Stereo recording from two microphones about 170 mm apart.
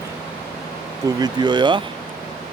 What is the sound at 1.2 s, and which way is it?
Speech, 25° right (ahead or behind).